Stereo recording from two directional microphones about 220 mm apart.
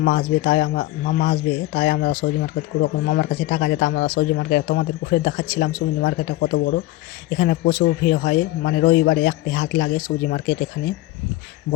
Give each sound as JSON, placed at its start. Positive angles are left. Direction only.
{"t": 0.0, "sound": "speech", "side_deg": 40}